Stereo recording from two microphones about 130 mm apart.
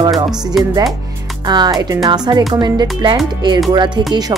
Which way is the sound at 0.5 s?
Centre (ahead or behind).